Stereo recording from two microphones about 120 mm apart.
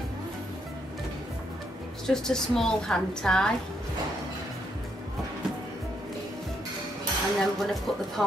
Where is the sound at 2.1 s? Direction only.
5° left (ahead or behind).